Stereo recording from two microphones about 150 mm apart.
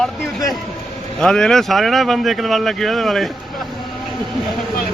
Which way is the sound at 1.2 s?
5° left (ahead or behind).